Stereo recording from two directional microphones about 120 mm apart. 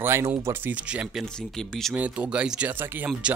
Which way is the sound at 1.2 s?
5° left (ahead or behind).